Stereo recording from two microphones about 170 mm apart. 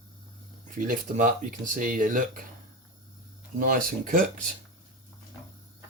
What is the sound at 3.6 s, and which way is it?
Speech, 50° right (ahead or behind).